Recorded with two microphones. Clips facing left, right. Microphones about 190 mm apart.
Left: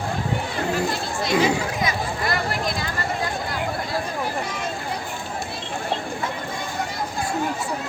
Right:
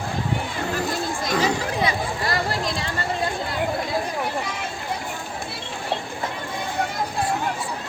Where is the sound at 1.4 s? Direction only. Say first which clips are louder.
Left 1 dB; 35° right (ahead or behind).